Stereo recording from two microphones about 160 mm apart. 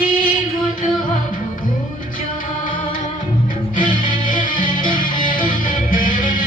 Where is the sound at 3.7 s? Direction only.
55° left (ahead or behind).